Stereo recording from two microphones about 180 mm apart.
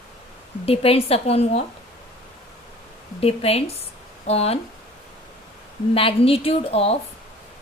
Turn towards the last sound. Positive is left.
turn(degrees=35)  # may be behind; listen again after turning